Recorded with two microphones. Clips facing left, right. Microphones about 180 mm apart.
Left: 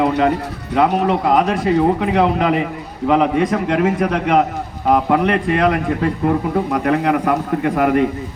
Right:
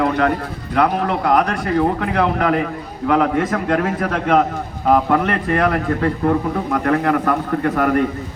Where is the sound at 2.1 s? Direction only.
20° left (ahead or behind); by 5.2 s 5° left (ahead or behind).